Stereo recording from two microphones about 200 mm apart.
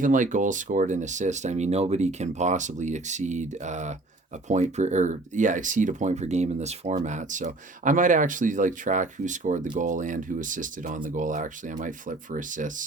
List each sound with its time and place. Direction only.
0.0 s speech: 40° right (ahead or behind)